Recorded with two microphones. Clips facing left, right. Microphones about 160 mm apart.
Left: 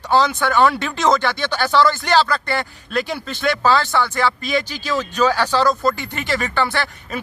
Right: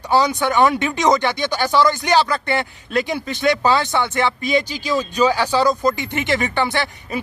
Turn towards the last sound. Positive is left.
turn(degrees=-15)  # may be behind; listen again after turning